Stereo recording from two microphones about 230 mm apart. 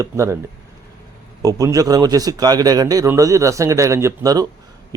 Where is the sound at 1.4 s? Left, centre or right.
Centre.